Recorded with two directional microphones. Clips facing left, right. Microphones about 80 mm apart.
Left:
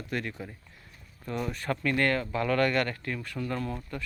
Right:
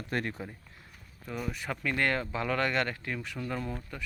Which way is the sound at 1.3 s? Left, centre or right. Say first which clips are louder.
Left 4 dB; centre.